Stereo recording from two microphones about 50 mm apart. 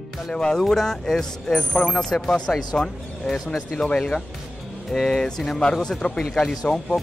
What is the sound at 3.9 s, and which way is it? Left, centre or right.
Speech, centre.